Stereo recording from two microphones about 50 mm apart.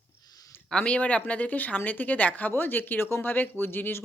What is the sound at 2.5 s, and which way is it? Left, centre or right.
A woman's voice, left.